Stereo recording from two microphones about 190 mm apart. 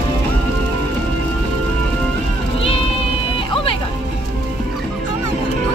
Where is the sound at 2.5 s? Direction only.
30° left (ahead or behind).